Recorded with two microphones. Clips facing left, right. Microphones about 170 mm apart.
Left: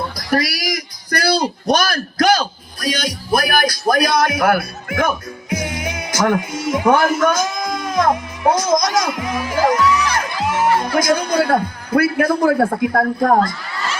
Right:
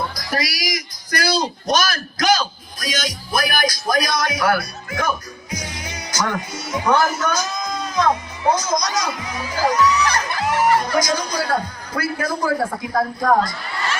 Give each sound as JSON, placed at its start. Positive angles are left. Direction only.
{"t": 0.2, "sound": "a man's voice", "side_deg": 60}